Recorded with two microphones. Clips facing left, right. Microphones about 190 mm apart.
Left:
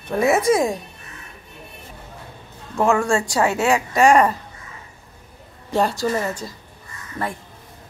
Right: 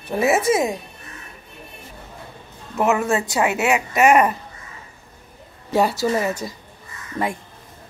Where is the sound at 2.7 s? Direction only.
20° right (ahead or behind).